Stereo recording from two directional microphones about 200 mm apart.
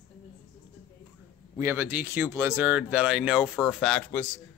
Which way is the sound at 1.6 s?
10° right (ahead or behind).